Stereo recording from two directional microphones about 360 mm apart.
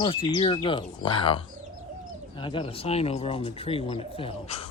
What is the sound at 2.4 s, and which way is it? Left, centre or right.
Speech, centre.